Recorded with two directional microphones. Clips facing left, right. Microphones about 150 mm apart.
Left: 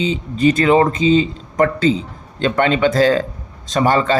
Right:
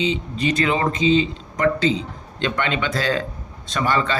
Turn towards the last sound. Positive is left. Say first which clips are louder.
# left 6 dB
turn(degrees=40)  # may be behind; listen again after turning